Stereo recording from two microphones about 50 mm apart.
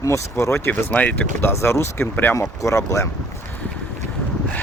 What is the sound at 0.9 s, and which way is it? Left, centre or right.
Speech, left.